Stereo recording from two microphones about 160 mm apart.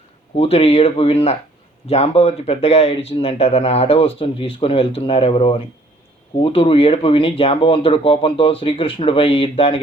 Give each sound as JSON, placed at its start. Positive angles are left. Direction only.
{"t": 0.3, "sound": "speech", "side_deg": 40}